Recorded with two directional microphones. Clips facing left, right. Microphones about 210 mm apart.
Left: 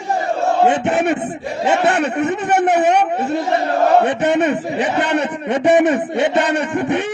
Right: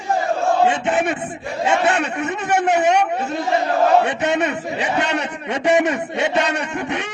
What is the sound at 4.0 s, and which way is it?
A man's voice, 55° left (ahead or behind).